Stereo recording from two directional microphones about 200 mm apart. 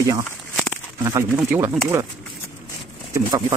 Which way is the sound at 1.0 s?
15° right (ahead or behind).